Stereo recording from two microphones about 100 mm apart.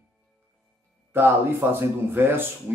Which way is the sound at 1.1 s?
20° right (ahead or behind).